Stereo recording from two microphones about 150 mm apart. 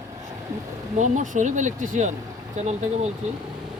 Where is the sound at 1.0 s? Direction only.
55° right (ahead or behind).